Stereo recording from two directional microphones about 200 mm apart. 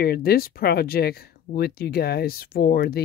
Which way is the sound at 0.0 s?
50° left (ahead or behind).